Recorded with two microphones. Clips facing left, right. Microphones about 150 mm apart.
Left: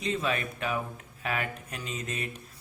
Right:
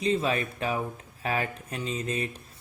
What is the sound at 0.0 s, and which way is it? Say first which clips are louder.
Speech: right 4 dB; 30° right (ahead or behind).